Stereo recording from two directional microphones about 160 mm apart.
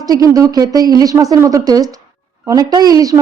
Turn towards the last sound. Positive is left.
turn(degrees=-20)  # may be behind; listen again after turning